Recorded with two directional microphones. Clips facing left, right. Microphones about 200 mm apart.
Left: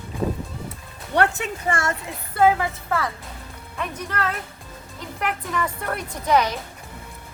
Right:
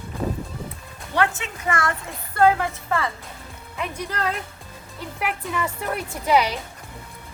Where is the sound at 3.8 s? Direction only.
10° right (ahead or behind).